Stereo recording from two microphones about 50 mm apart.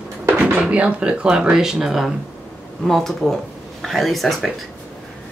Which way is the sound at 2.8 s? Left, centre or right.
Centre.